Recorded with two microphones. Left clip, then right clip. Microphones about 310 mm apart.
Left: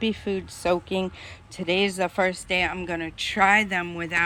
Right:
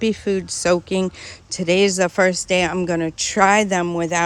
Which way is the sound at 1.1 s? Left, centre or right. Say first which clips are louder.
Right 8 dB; right.